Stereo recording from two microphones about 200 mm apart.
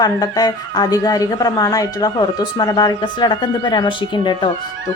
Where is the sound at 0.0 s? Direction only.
20° left (ahead or behind).